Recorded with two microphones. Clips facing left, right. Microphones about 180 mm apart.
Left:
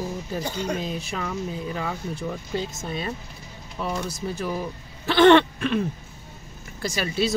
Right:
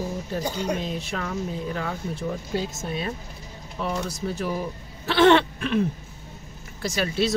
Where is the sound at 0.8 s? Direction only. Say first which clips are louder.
Even; centre (ahead or behind).